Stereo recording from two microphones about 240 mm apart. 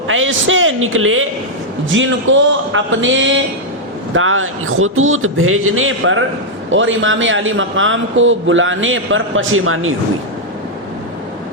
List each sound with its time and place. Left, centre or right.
0.1 s a man's voice: right